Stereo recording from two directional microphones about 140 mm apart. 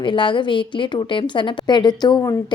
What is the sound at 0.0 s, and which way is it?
A woman's voice, 35° left (ahead or behind).